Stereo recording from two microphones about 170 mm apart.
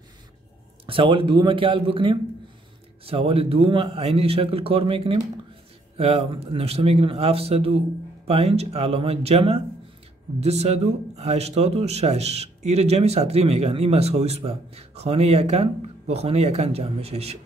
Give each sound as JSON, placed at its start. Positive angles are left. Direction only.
{"t": 0.8, "sound": "a man's voice", "side_deg": -30}